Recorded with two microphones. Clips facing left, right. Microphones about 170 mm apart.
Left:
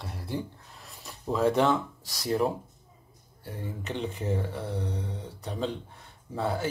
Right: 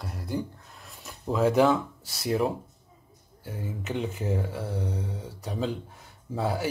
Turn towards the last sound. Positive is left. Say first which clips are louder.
# right 1 dB
turn(degrees=-5)  # may be behind; listen again after turning